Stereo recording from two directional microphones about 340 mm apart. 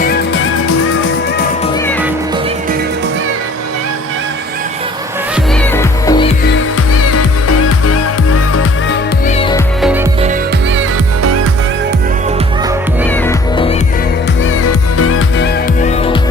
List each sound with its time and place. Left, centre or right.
5.7 s music: centre
9.8 s music: centre
13.2 s music: centre
14.7 s music: left